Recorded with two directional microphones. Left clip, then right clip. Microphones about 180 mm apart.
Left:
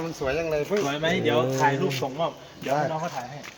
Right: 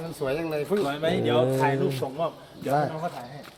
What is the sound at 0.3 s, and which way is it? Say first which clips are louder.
Speech: left 2 dB; 70° right (ahead or behind).